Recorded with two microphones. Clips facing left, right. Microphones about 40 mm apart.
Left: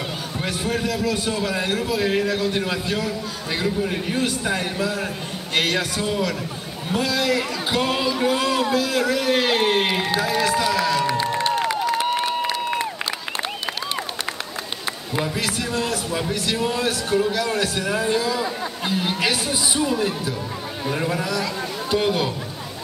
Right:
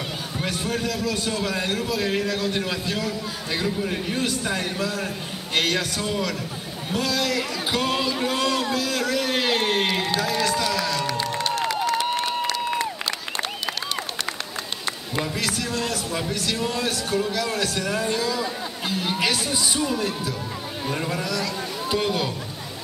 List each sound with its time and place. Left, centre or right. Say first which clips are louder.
0.4 s a man's voice: left 2 dB; centre
12.4 s crowd: left 1 dB; centre
15.1 s a man's voice: left 2 dB; centre